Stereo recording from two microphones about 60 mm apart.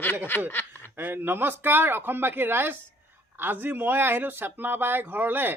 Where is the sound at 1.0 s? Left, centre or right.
Right.